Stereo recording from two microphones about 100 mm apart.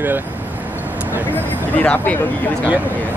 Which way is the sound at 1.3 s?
15° left (ahead or behind).